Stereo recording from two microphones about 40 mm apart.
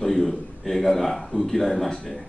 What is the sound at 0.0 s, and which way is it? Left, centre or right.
Speech, centre.